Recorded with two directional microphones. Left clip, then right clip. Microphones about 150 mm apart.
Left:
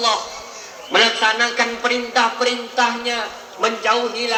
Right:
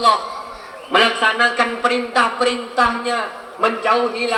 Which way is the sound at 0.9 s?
20° right (ahead or behind).